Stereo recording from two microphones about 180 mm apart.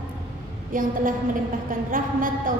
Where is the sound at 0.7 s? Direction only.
50° right (ahead or behind).